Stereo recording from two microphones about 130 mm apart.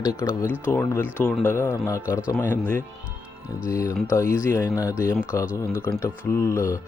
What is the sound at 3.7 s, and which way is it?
Speech, 25° left (ahead or behind).